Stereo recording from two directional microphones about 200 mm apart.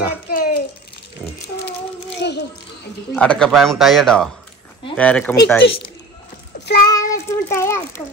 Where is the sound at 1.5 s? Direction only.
60° left (ahead or behind).